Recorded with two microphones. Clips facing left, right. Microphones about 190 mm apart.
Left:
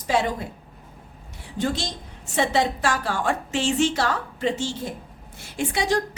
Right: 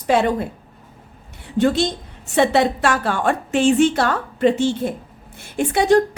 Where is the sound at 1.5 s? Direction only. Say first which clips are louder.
Right 9 dB; 65° right (ahead or behind).